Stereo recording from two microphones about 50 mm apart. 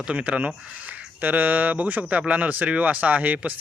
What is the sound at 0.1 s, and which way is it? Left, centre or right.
Speech, right.